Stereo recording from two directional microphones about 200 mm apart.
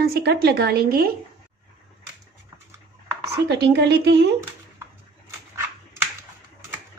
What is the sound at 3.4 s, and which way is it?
Speech, 55° right (ahead or behind).